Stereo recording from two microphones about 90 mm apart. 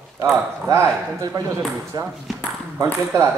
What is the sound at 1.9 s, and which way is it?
Speech, 50° right (ahead or behind).